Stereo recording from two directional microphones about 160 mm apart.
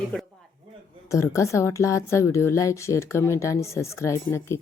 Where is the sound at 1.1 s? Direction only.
20° left (ahead or behind).